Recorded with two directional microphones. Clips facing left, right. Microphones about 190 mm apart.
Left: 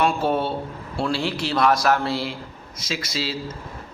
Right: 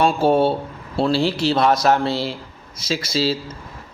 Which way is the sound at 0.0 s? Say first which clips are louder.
Right 5 dB; 30° right (ahead or behind).